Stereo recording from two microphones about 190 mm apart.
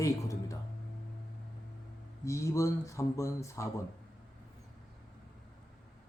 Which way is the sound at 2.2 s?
15° left (ahead or behind).